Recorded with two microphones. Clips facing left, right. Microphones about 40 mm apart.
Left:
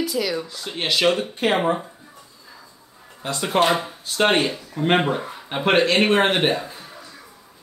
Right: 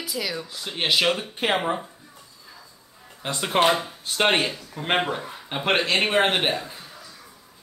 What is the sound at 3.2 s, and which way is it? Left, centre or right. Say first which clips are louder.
Speech: left 2 dB; right.